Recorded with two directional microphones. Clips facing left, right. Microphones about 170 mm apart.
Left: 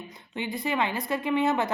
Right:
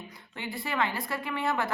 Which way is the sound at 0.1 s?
20° left (ahead or behind).